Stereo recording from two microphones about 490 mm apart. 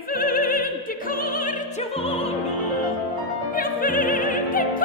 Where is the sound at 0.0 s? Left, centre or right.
Centre.